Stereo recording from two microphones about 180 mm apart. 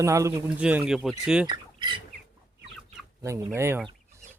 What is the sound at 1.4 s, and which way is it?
Squawk, 25° right (ahead or behind).